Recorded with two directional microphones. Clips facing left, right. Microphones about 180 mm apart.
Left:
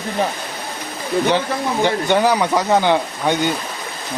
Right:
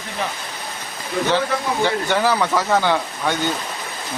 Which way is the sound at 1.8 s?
15° left (ahead or behind).